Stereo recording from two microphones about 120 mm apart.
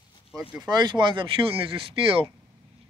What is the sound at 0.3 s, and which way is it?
Speech, 5° right (ahead or behind).